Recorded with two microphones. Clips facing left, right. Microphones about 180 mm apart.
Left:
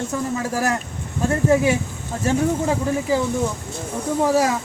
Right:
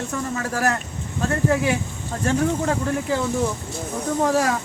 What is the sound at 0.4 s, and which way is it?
Speech, 10° left (ahead or behind).